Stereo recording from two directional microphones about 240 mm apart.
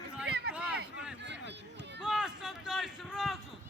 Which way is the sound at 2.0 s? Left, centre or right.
Centre.